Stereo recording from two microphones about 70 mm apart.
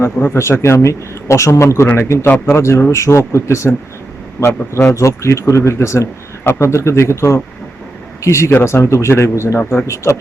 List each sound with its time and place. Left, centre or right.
0.0 s speech: left
9.6 s speech: left
9.8 s speech: left